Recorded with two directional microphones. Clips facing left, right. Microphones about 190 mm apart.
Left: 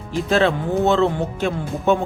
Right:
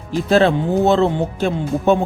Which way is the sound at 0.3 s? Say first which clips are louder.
Right 4 dB; 35° right (ahead or behind).